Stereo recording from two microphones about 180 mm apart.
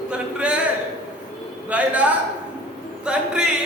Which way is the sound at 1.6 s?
10° right (ahead or behind).